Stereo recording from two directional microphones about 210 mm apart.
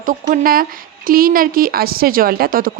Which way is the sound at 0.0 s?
40° right (ahead or behind).